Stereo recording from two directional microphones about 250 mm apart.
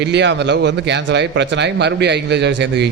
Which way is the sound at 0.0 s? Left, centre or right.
Right.